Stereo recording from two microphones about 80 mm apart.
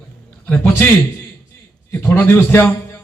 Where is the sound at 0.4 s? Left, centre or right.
Centre.